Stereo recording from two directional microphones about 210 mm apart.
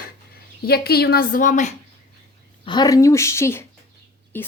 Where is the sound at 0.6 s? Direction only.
50° left (ahead or behind).